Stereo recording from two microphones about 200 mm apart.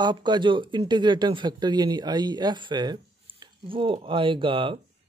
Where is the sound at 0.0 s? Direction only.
20° right (ahead or behind).